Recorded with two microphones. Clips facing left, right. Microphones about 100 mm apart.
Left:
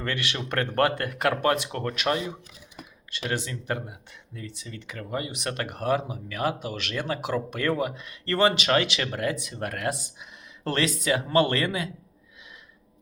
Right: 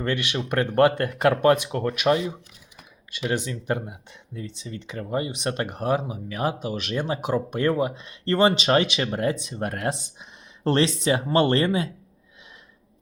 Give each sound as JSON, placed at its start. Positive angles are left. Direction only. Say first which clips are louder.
{"t": 0.0, "sound": "speech", "louder": "right 4 dB", "side_deg": -20}